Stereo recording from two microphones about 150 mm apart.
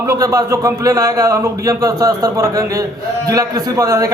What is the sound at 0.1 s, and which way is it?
A man's voice, 20° right (ahead or behind).